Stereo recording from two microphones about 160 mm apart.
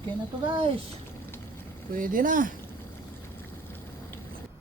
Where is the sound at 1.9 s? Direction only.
60° right (ahead or behind).